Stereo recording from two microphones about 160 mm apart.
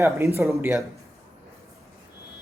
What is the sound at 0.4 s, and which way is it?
Speech, 10° right (ahead or behind).